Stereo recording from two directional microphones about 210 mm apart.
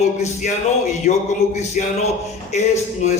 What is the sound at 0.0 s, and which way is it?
A man's voice, 30° left (ahead or behind).